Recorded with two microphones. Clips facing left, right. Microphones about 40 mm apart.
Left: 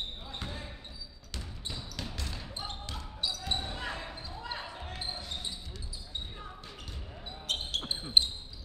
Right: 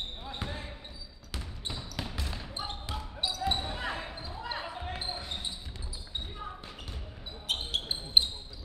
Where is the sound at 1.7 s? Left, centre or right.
Right.